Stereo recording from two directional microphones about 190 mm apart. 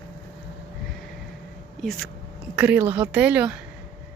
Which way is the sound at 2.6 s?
10° right (ahead or behind).